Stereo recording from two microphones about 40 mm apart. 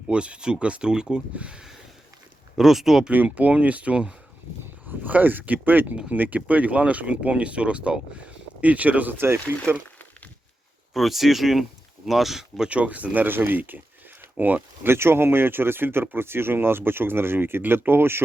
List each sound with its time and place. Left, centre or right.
0.1 s speech: right
2.6 s speech: centre
3.3 s speech: right
4.9 s speech: right
9.1 s speech: right
10.9 s speech: centre
12.6 s speech: right
13.2 s speech: right
14.8 s speech: right